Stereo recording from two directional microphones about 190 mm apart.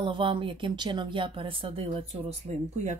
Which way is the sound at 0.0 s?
25° right (ahead or behind).